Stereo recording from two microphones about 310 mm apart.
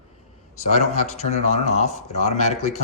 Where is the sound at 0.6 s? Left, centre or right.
Left.